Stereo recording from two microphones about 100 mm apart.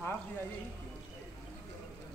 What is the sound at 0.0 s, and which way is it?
Music, 20° left (ahead or behind).